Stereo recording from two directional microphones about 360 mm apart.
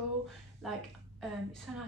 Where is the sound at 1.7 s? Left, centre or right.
Centre.